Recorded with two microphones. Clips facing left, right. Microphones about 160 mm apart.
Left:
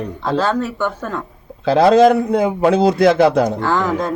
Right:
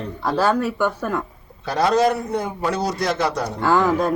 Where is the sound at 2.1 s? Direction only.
55° left (ahead or behind).